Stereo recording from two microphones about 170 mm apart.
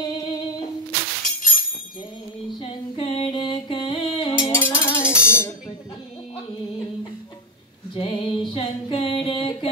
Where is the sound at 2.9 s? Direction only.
30° left (ahead or behind).